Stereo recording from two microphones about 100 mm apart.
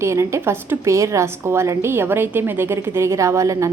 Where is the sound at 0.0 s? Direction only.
30° right (ahead or behind).